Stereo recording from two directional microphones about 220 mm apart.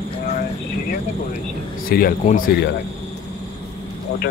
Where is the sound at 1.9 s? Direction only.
40° left (ahead or behind).